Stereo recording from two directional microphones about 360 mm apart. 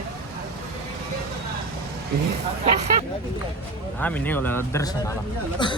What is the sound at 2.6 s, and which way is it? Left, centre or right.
Speech, centre.